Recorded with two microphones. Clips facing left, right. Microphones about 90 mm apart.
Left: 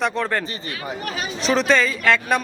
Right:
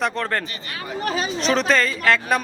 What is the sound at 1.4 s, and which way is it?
A man's voice, centre (ahead or behind).